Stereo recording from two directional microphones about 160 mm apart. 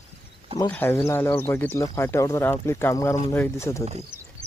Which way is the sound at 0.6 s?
15° left (ahead or behind).